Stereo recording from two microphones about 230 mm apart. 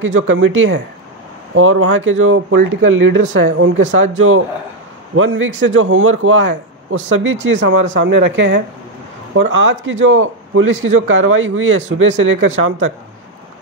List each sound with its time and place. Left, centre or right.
0.0 s a man's voice: right
5.1 s a man's voice: right